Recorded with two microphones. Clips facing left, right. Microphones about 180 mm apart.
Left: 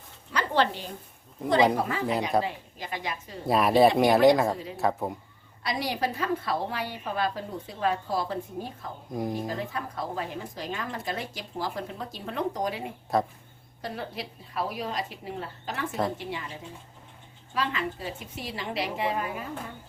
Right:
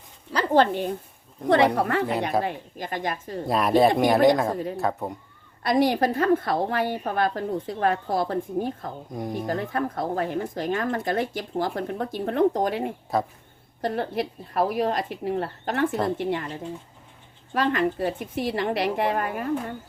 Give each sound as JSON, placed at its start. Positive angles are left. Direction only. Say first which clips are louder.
{"t": 0.3, "sound": "a sound", "louder": "right 6 dB", "side_deg": -50}
{"t": 1.7, "sound": "a woman's voice", "louder": "right 5 dB", "side_deg": -65}
{"t": 2.4, "sound": "a woman's voice", "louder": "right 4 dB", "side_deg": -50}
{"t": 3.4, "sound": "speech", "louder": "right 1 dB", "side_deg": 0}
{"t": 5.6, "sound": "a woman's voice", "louder": "right 9 dB", "side_deg": -50}
{"t": 13.1, "sound": "speech", "louder": "even", "side_deg": 0}
{"t": 13.8, "sound": "a woman's voice", "louder": "right 9 dB", "side_deg": -55}
{"t": 17.5, "sound": "a woman's voice", "louder": "right 7 dB", "side_deg": -55}